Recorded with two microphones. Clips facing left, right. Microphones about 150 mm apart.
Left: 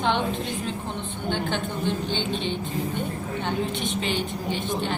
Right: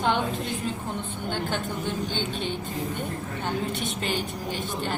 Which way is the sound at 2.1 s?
45° right (ahead or behind).